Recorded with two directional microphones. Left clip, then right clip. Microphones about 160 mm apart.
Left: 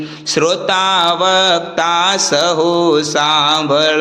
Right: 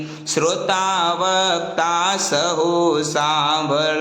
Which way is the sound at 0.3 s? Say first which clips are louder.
Left 5 dB; 25° left (ahead or behind).